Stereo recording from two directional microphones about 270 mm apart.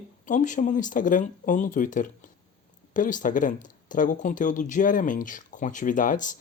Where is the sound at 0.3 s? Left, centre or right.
Left.